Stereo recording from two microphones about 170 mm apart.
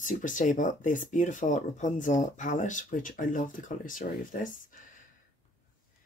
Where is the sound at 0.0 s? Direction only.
50° left (ahead or behind).